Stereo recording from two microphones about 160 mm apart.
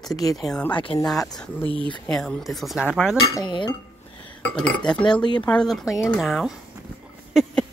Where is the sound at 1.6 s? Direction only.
30° left (ahead or behind).